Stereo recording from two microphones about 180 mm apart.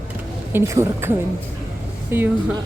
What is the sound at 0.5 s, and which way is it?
A woman's voice, 15° right (ahead or behind).